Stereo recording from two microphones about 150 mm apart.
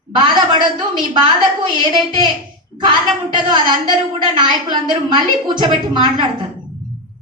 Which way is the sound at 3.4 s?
30° right (ahead or behind).